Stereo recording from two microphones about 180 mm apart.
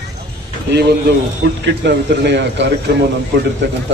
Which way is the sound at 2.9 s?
65° right (ahead or behind).